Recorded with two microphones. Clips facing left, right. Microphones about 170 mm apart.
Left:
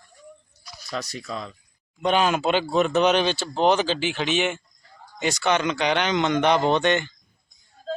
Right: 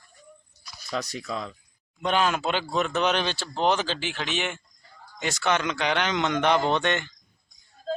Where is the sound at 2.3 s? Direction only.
15° left (ahead or behind).